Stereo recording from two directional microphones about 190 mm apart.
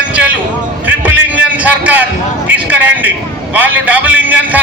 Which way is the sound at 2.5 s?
10° right (ahead or behind).